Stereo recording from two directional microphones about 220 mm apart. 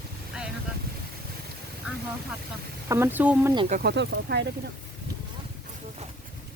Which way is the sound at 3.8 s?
50° right (ahead or behind).